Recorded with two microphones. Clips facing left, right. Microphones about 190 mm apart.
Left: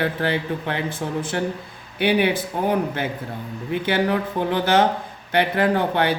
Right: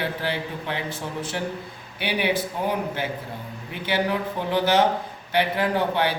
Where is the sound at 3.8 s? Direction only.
55° left (ahead or behind).